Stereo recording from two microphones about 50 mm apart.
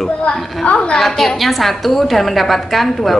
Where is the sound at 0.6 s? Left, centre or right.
Left.